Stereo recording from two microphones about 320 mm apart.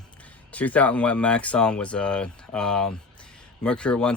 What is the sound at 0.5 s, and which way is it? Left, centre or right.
Speech, centre.